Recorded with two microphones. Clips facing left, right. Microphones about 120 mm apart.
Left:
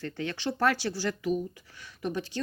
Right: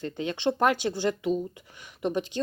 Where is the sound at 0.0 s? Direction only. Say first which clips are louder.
Right 5 dB; 20° right (ahead or behind).